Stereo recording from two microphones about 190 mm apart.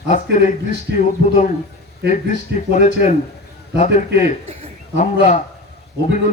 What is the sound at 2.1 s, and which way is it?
Speech, 40° left (ahead or behind).